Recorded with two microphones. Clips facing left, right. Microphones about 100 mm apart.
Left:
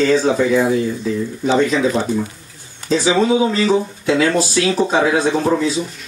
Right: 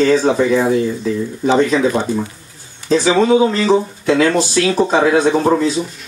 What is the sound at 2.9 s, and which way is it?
Speech, 45° right (ahead or behind).